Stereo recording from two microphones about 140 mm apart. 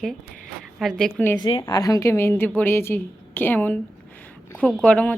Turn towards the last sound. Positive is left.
turn(degrees=10)  # may be behind; listen again after turning